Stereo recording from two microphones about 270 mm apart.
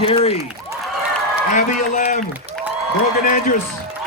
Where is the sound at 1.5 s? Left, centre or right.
Left.